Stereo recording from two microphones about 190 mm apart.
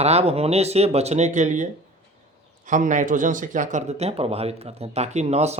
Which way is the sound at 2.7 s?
40° right (ahead or behind).